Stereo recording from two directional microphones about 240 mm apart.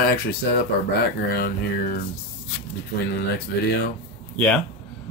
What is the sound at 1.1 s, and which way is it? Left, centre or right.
Speech, left.